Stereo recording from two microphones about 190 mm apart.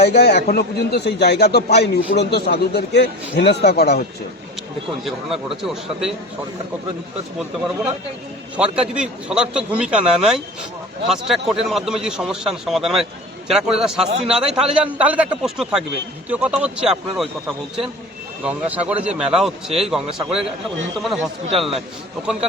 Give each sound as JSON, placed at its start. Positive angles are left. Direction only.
{"t": 0.0, "sound": "a man's voice", "side_deg": 60}
{"t": 5.0, "sound": "a man's voice", "side_deg": 0}
{"t": 8.5, "sound": "a man's voice", "side_deg": -5}
{"t": 18.4, "sound": "a man's voice", "side_deg": -5}